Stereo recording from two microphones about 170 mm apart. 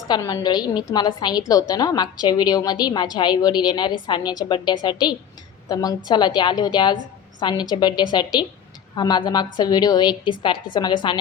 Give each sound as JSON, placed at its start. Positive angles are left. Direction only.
{"t": 0.3, "sound": "a woman's voice", "side_deg": 25}